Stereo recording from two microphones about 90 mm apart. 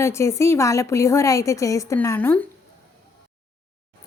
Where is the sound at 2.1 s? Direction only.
20° left (ahead or behind).